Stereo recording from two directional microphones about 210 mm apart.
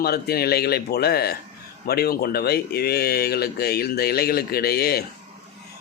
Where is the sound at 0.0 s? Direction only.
50° left (ahead or behind).